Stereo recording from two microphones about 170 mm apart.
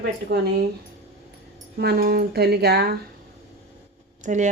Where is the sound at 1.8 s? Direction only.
65° right (ahead or behind).